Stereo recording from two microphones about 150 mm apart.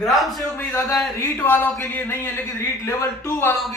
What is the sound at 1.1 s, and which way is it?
A woman's voice, 15° left (ahead or behind).